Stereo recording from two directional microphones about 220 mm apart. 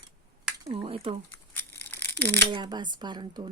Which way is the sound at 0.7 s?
25° right (ahead or behind).